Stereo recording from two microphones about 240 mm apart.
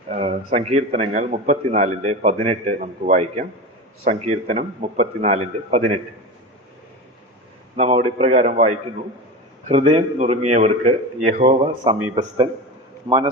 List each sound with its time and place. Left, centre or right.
0.2 s a man's voice: right
7.8 s a man's voice: right
13.1 s a man's voice: right